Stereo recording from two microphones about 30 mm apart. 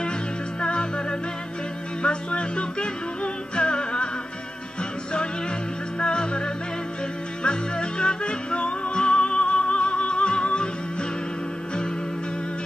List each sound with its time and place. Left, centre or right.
0.6 s music: left
2.0 s music: left
5.9 s music: left